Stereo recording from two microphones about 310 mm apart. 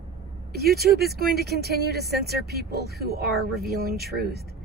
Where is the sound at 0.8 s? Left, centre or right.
Right.